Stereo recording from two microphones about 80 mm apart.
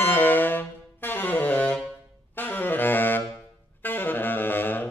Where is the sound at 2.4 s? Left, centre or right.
Left.